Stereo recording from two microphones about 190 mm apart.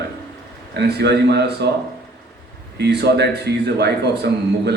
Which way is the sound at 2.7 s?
60° right (ahead or behind).